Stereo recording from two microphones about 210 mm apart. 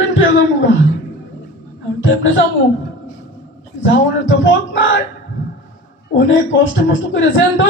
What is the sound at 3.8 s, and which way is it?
A man's voice, 65° left (ahead or behind).